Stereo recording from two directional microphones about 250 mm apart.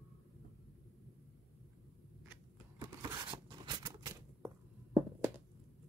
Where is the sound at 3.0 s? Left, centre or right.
Centre.